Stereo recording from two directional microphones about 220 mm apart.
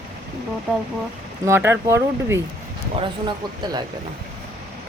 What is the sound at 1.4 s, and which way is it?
Speech, 10° right (ahead or behind).